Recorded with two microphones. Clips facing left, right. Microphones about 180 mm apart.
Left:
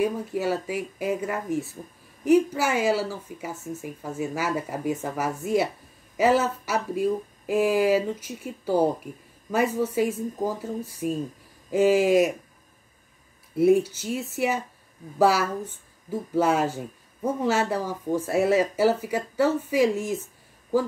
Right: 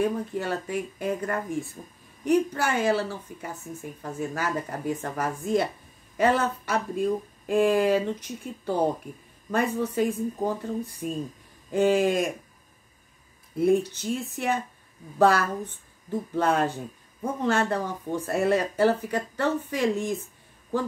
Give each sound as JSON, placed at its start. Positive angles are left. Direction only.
{"t": 0.0, "sound": "speech", "side_deg": 5}
{"t": 13.6, "sound": "speech", "side_deg": 5}